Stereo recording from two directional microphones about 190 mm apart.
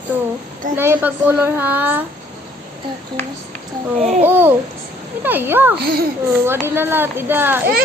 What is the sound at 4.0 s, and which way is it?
Speech, 35° right (ahead or behind).